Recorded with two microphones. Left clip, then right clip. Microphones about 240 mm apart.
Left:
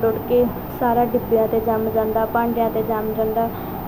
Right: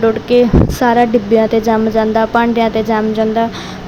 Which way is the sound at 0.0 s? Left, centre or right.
Right.